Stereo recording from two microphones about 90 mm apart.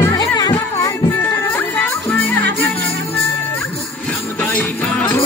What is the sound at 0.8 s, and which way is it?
Music, 30° left (ahead or behind).